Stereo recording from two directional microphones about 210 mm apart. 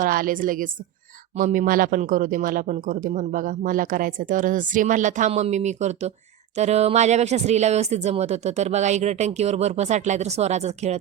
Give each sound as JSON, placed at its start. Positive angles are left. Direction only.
{"t": 0.0, "sound": "speech", "side_deg": -40}